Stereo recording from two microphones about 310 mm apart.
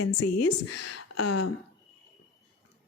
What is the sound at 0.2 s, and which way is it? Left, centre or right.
A woman's voice, left.